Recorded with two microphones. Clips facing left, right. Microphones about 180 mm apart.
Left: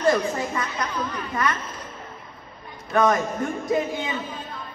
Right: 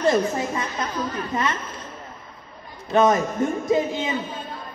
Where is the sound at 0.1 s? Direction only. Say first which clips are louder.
Right 2 dB; 25° right (ahead or behind).